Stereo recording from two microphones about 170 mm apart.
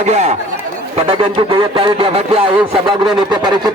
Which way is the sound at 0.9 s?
30° right (ahead or behind).